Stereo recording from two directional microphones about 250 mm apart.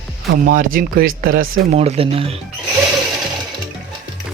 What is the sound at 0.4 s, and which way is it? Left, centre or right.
Speech, right.